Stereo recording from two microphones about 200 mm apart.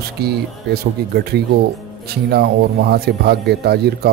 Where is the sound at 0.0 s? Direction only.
55° right (ahead or behind).